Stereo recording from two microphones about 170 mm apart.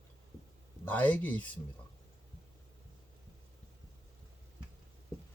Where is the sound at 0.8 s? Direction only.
10° left (ahead or behind).